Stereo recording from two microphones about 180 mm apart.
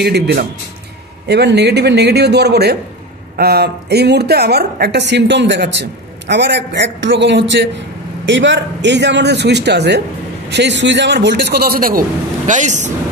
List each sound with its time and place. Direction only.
0.0 s a woman's voice: 65° right (ahead or behind)
8.3 s a man's voice: 85° right; by 12.0 s 55° right (ahead or behind)
12.4 s a man's voice: 45° right (ahead or behind)